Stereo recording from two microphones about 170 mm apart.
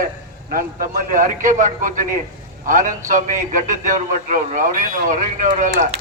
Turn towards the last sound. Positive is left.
turn(degrees=-45)  # may be behind; listen again after turning